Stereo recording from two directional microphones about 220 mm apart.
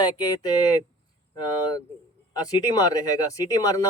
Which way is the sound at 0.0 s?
20° left (ahead or behind).